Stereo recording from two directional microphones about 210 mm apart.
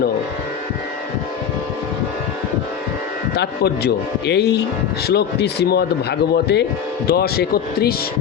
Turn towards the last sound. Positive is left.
turn(degrees=50)  # may be behind; listen again after turning